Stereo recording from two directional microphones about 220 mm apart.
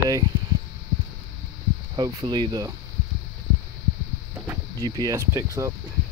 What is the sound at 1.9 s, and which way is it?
Speech, 20° right (ahead or behind).